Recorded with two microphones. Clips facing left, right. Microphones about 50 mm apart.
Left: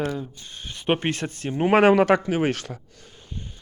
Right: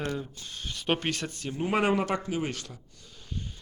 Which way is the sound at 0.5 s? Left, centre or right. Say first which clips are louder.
Left 5 dB; centre.